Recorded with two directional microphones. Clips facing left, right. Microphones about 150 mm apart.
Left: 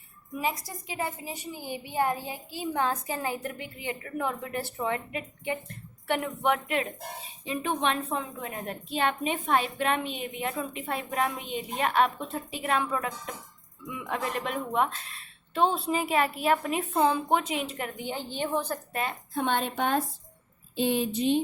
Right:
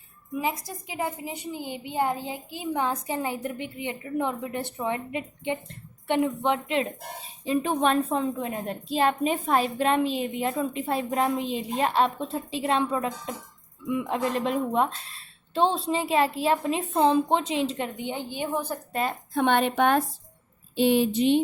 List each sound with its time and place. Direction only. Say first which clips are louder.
0.3 s a woman's voice: right 2 dB; 20° right (ahead or behind)
7.4 s a woman's voice: right 5 dB; 35° right (ahead or behind); by 18.8 s 10° right (ahead or behind)
19.3 s a woman's voice: right 6 dB; 65° right (ahead or behind)